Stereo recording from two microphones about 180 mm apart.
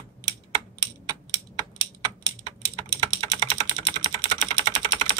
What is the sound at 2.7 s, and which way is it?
Typing, 35° right (ahead or behind).